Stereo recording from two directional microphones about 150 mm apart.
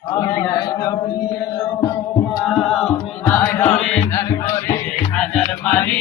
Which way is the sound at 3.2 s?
10° left (ahead or behind).